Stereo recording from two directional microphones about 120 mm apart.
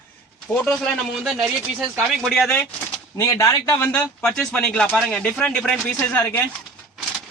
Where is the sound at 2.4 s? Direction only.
15° left (ahead or behind).